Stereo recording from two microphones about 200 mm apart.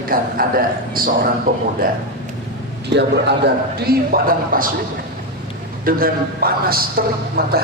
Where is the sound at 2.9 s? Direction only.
55° right (ahead or behind).